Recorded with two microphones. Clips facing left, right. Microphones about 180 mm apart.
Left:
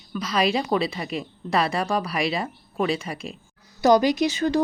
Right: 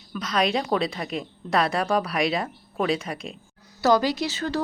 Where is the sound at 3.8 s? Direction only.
15° left (ahead or behind).